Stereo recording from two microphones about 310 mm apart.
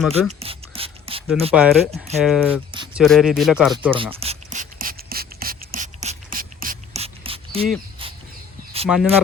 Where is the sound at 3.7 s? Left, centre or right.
Centre.